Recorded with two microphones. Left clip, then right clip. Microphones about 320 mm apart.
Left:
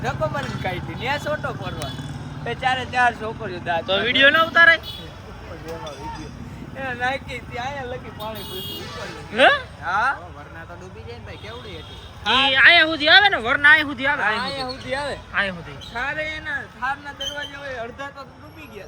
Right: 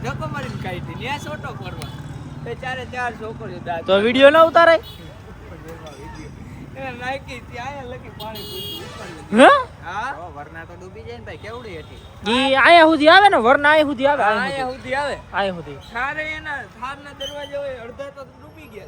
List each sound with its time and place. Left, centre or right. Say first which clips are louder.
0.0 s a sound: left 4 dB; centre
1.0 s speech: left 4 dB; centre
2.5 s speech: left 6 dB; left
3.8 s speech: right 4 dB; centre
6.8 s speech: left 3 dB; centre
9.3 s speech: right 5 dB; centre
12.2 s speech: left 1 dB; centre
14.2 s speech: right 4 dB; right
15.3 s speech: left 1 dB; centre
15.9 s speech: right 1 dB; right